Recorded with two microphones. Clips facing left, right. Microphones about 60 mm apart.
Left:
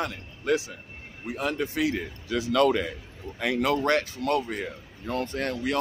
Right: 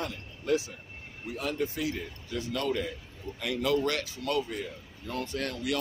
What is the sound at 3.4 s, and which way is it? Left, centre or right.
Speech, left.